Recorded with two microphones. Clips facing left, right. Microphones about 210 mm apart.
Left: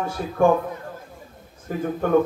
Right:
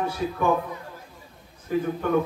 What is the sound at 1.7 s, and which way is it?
Speech, 45° left (ahead or behind).